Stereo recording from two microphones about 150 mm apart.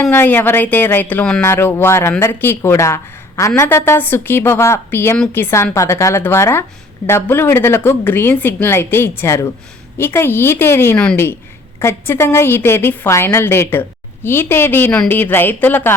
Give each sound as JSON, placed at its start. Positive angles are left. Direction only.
{"t": 0.1, "sound": "speech", "side_deg": 15}